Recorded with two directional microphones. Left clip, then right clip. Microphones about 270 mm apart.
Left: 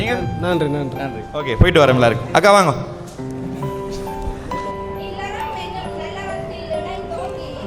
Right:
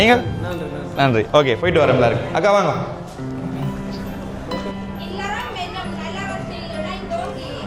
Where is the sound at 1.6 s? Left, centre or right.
Centre.